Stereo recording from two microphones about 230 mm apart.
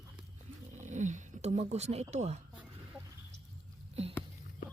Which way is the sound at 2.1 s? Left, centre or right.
Right.